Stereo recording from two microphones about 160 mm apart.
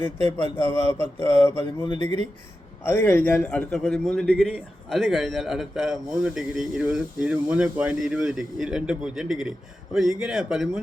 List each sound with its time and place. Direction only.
0.3 s speech: 15° left (ahead or behind)
1.6 s a sound: 30° left (ahead or behind)
2.8 s a man's voice: 15° left (ahead or behind); by 10.7 s centre (ahead or behind)